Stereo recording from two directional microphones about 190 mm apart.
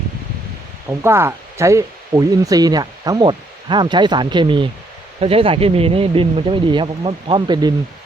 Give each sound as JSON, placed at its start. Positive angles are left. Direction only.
{"t": 0.9, "sound": "speech", "side_deg": -15}